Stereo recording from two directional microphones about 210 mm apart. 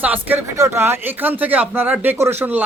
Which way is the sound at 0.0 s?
10° right (ahead or behind).